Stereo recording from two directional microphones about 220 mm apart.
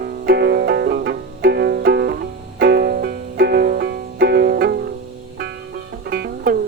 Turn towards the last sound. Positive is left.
turn(degrees=-45)  # may be behind; listen again after turning